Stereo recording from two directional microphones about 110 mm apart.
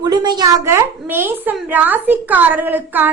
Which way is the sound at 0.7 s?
20° right (ahead or behind).